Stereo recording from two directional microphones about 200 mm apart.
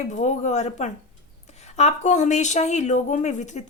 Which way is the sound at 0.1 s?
35° left (ahead or behind).